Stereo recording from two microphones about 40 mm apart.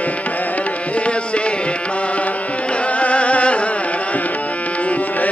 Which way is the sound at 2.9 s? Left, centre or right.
Left.